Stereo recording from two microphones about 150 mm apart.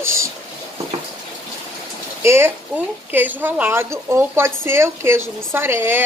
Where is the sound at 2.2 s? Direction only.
15° right (ahead or behind).